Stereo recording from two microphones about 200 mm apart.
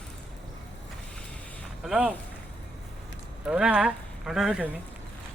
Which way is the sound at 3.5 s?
5° right (ahead or behind).